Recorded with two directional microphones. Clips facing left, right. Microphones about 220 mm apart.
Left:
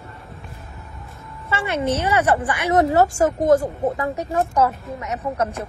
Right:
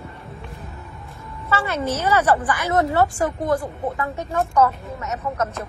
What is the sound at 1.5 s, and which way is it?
A woman's voice, 25° left (ahead or behind).